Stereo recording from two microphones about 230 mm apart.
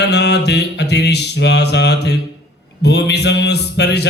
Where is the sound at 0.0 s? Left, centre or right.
Left.